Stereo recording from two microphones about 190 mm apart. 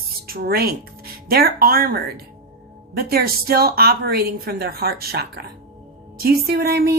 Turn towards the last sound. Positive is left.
turn(degrees=-55)  # may be behind; listen again after turning